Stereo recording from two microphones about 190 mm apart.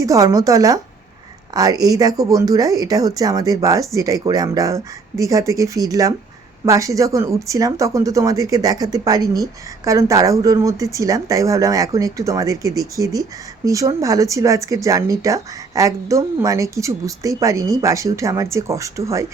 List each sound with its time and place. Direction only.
0.0 s speech: 15° right (ahead or behind)